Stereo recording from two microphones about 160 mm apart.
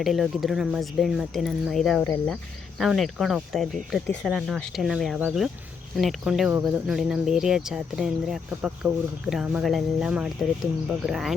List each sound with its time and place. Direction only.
0.0 s speech: centre (ahead or behind)